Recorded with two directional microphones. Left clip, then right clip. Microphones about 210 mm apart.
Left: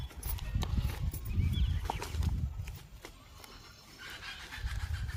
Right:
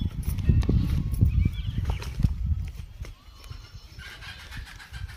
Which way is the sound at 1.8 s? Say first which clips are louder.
Left 1 dB; 25° left (ahead or behind).